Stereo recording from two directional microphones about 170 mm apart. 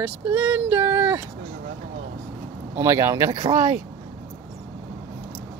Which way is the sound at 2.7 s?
15° right (ahead or behind).